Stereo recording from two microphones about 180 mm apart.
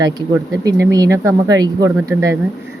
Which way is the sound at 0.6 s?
20° right (ahead or behind).